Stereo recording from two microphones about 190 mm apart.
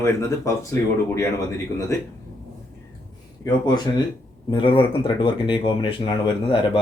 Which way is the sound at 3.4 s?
25° left (ahead or behind).